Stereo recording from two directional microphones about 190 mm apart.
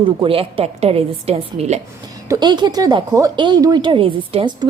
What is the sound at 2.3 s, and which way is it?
Speech, 20° right (ahead or behind).